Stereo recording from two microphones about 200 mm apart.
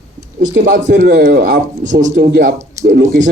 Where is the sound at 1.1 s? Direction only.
55° right (ahead or behind).